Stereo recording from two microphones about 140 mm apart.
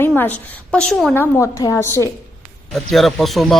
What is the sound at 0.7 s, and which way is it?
Speech, centre (ahead or behind).